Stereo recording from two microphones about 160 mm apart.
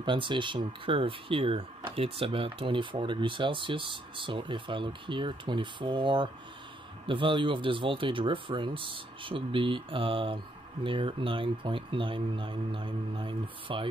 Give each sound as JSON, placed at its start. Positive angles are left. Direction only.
{"t": 0.0, "sound": "speech", "side_deg": -30}